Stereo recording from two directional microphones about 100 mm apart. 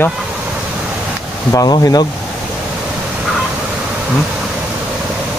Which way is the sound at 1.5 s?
35° left (ahead or behind).